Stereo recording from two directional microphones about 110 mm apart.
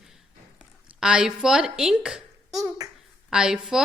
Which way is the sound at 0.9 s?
10° right (ahead or behind).